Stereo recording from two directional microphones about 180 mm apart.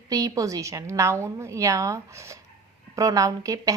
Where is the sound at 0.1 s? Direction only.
20° right (ahead or behind).